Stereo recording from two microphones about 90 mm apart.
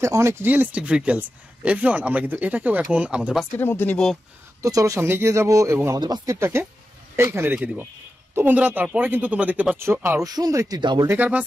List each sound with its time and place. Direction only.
0.0 s speech: 30° right (ahead or behind)
0.5 s speech: 20° right (ahead or behind)
3.5 s speech: 25° left (ahead or behind)
4.6 s speech: 40° right (ahead or behind)
5.9 s speech: 55° right (ahead or behind)
6.2 s a man's voice: 30° right (ahead or behind)
9.8 s a man's voice: 25° right (ahead or behind)
10.2 s speech: 45° right (ahead or behind)
10.8 s speech: 60° right (ahead or behind)
11.1 s a man's voice: 20° right (ahead or behind)